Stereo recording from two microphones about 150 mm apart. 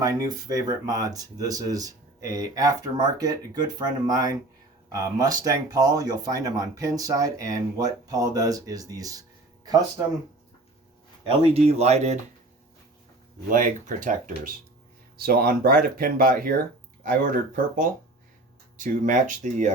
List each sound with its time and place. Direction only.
0.0 s speech: 25° right (ahead or behind)
11.4 s speech: 45° right (ahead or behind)
13.5 s speech: 60° right (ahead or behind)
15.2 s speech: 85° right; by 19.7 s 55° right (ahead or behind)